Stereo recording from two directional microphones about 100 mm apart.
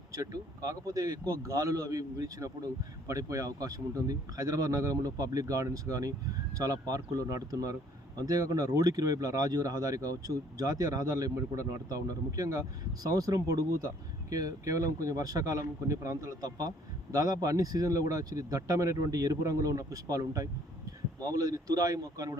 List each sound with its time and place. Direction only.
0.2 s speech: 35° right (ahead or behind)